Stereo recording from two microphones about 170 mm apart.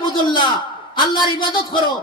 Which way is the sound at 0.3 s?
25° left (ahead or behind).